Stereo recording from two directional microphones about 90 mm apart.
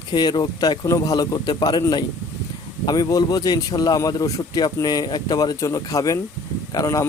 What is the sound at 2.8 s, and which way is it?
Speech, 50° left (ahead or behind).